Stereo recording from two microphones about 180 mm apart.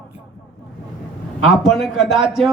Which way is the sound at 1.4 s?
Centre (ahead or behind).